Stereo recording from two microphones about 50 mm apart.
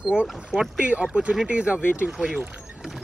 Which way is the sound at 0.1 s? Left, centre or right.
Right.